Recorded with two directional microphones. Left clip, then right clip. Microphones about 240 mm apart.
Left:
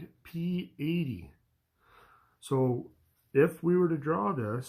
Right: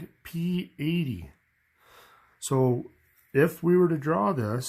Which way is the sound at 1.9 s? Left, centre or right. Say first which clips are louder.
Right 4 dB; right.